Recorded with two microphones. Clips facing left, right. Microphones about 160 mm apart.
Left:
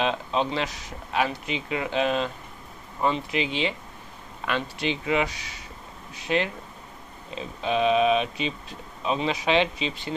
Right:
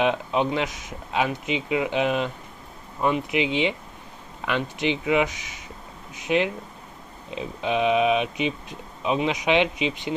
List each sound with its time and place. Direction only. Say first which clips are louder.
0.0 s speech: right 3 dB; 15° right (ahead or behind)